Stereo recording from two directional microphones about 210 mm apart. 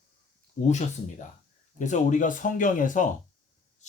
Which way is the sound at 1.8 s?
35° left (ahead or behind).